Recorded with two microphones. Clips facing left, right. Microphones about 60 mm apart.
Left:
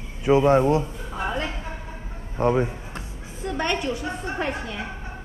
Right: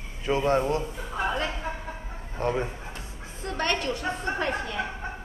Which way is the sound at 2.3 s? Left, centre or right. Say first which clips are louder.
Left 6 dB; centre.